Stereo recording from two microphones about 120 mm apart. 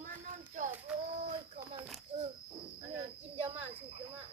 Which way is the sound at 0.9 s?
10° right (ahead or behind).